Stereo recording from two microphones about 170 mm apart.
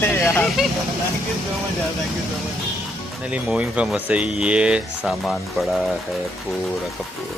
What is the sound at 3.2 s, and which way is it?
Speech, 5° right (ahead or behind).